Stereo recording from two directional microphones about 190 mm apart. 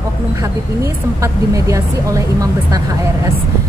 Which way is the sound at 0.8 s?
15° right (ahead or behind).